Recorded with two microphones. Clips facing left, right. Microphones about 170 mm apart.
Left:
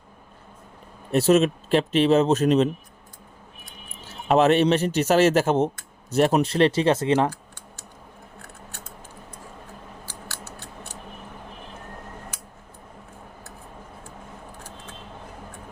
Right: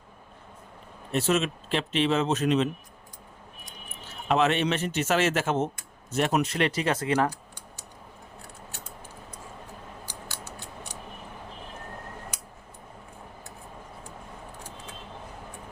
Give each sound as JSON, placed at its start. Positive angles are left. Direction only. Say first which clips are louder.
{"t": 1.1, "sound": "speech", "louder": "left 7 dB", "side_deg": 40}
{"t": 4.3, "sound": "speech", "louder": "left 6 dB", "side_deg": 40}
{"t": 10.1, "sound": "a sound", "louder": "left 1 dB", "side_deg": -15}